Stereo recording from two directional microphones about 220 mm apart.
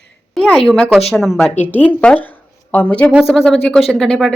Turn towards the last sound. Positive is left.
turn(degrees=5)  # may be behind; listen again after turning